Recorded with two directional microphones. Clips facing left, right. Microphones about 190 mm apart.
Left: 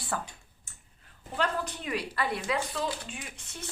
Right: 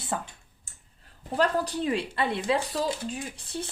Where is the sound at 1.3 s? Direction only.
35° right (ahead or behind).